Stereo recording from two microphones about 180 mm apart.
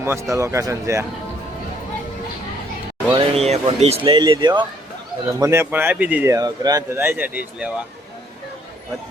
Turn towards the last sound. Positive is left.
turn(degrees=-10)  # may be behind; listen again after turning